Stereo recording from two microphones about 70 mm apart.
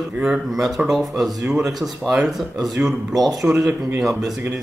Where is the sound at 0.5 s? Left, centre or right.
Centre.